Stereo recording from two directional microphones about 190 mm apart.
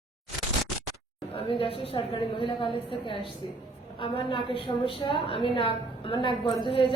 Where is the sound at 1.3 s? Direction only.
30° left (ahead or behind).